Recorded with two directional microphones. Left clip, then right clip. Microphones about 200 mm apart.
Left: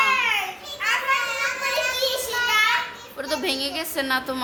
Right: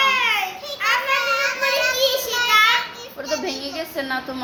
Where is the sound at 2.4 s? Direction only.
5° left (ahead or behind).